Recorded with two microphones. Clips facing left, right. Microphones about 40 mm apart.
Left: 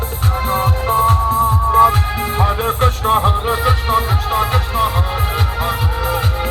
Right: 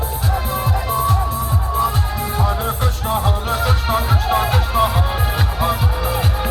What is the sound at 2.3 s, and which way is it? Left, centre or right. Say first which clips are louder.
Music: left 4 dB; left.